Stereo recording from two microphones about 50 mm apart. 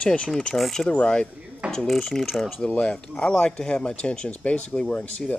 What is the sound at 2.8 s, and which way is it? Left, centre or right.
Speech, left.